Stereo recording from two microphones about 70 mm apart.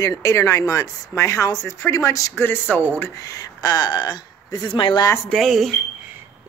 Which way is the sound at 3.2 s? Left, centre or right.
Left.